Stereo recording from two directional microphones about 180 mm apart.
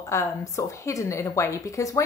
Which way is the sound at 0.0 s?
15° left (ahead or behind).